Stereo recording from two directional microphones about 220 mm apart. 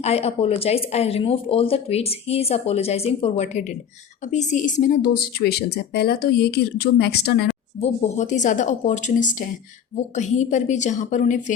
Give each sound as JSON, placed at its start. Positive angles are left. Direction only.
{"t": 0.0, "sound": "speech", "side_deg": 30}
{"t": 7.8, "sound": "a woman's voice", "side_deg": 35}